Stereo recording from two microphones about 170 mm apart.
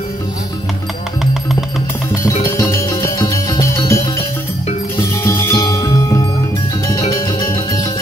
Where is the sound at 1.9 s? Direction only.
15° left (ahead or behind).